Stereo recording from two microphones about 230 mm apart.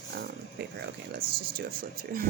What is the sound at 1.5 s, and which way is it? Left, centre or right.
Speech, right.